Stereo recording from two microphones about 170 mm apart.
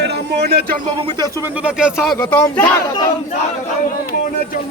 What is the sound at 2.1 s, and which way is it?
Speech, 10° left (ahead or behind).